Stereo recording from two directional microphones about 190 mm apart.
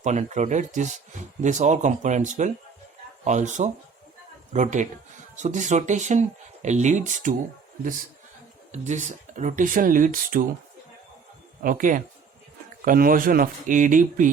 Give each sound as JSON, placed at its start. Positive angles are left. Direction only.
{"t": 0.0, "sound": "speech", "side_deg": -40}
{"t": 8.7, "sound": "speech", "side_deg": -40}
{"t": 11.6, "sound": "speech", "side_deg": -45}